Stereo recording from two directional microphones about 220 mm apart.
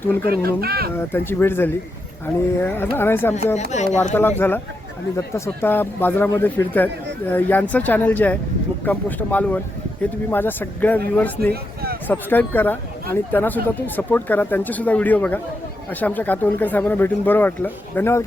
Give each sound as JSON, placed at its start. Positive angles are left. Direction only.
{"t": 0.2, "sound": "speech", "side_deg": -45}
{"t": 0.9, "sound": "speech", "side_deg": 10}
{"t": 3.5, "sound": "speech", "side_deg": 30}
{"t": 4.1, "sound": "speech", "side_deg": 10}
{"t": 12.0, "sound": "speech", "side_deg": 10}